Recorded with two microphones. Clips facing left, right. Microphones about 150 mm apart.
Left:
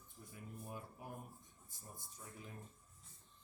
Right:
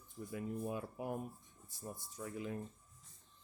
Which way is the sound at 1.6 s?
80° right.